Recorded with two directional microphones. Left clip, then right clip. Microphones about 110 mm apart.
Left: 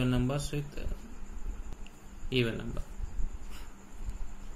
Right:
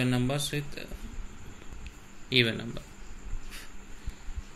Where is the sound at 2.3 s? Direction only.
30° right (ahead or behind).